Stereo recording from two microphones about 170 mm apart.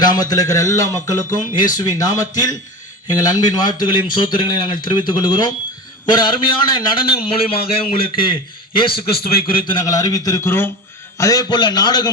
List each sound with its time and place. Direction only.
0.0 s a man's voice: 25° left (ahead or behind)
1.5 s speech: 50° left (ahead or behind)
1.8 s a man's voice: 20° left (ahead or behind)